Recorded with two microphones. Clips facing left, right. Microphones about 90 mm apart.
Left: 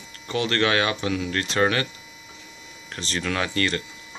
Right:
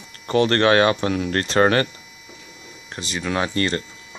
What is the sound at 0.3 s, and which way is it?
Speech, 40° right (ahead or behind).